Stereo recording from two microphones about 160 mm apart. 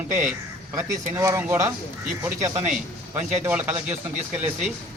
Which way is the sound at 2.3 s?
50° right (ahead or behind).